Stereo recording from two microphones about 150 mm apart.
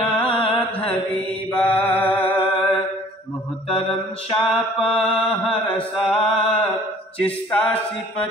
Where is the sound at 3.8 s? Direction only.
40° left (ahead or behind).